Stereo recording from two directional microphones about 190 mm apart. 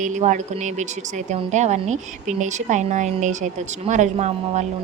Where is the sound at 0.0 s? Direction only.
40° right (ahead or behind).